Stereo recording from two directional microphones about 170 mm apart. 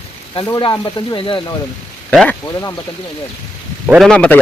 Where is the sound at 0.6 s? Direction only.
25° left (ahead or behind).